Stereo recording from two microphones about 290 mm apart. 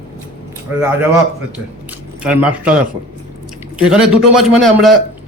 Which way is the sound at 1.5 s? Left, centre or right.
Centre.